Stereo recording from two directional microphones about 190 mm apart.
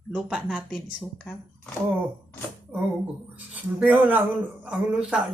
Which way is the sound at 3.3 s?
10° right (ahead or behind).